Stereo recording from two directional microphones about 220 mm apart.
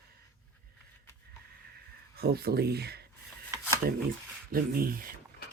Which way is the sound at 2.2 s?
45° right (ahead or behind).